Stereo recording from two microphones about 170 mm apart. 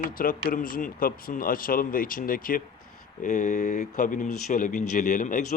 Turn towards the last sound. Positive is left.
turn(degrees=50)  # may be behind; listen again after turning